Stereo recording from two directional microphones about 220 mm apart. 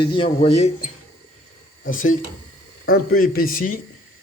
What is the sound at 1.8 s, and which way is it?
Speech, 40° left (ahead or behind).